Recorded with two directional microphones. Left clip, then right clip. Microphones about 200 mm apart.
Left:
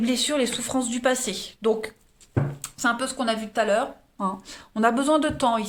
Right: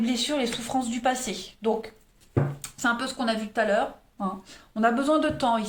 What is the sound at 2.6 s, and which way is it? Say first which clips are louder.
Speech: left 3 dB; 25° left (ahead or behind).